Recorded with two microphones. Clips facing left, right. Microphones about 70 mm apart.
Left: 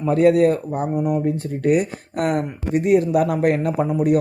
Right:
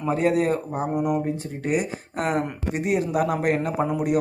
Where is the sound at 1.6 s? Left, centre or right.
Left.